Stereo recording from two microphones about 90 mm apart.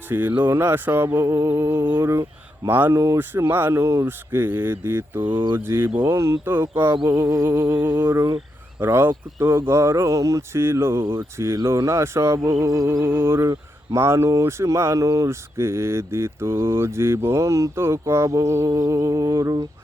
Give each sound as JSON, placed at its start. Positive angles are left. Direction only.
{"t": 0.1, "sound": "speech", "side_deg": -20}
{"t": 5.2, "sound": "speech", "side_deg": -65}
{"t": 5.5, "sound": "speech", "side_deg": -25}
{"t": 6.9, "sound": "a sound", "side_deg": -50}
{"t": 7.2, "sound": "speech", "side_deg": -30}
{"t": 8.1, "sound": "speech", "side_deg": -35}
{"t": 8.8, "sound": "speech", "side_deg": -25}
{"t": 13.1, "sound": "speech", "side_deg": -25}